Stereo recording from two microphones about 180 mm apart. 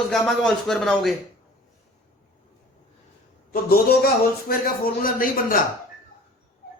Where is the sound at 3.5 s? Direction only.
55° left (ahead or behind).